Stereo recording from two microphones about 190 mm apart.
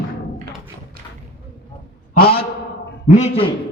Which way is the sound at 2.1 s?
55° left (ahead or behind).